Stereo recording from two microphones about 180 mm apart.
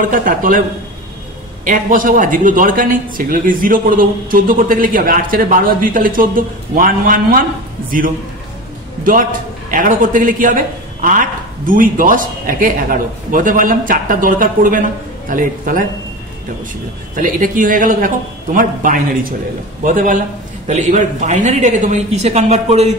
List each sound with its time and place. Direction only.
0.0 s a man's voice: 50° right (ahead or behind)
9.0 s a man's voice: 50° right (ahead or behind)
17.1 s a man's voice: 45° right (ahead or behind)